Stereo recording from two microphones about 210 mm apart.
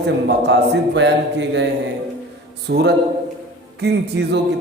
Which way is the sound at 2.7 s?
50° right (ahead or behind).